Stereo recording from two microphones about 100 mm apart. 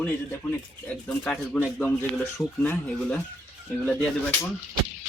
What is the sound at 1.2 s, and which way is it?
Speech, 10° left (ahead or behind).